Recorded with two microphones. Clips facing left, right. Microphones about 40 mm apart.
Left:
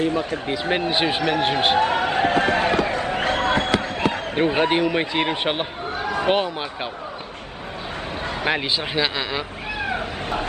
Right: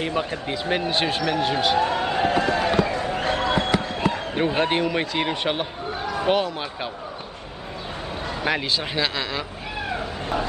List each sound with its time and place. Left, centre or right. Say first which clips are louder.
0.0 s a man's voice: left 3 dB; right
0.7 s speech: left 2 dB; centre
1.2 s a man's voice: left 2 dB; left
3.8 s basketball bounce: left 1 dB; left
4.6 s speech: left 2 dB; centre
5.1 s speech: left 2 dB; left
5.9 s a sound: left 2 dB; left
8.2 s a sound: left 2 dB; left
8.5 s speech: left 1 dB; centre